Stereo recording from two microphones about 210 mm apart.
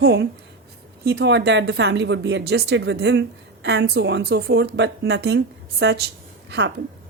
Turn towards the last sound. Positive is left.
turn(degrees=-55)  # may be behind; listen again after turning